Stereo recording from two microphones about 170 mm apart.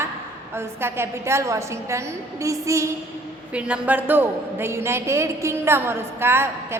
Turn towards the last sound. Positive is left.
turn(degrees=-15)  # may be behind; listen again after turning